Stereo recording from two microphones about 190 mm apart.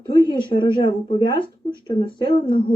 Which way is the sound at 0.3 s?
25° left (ahead or behind).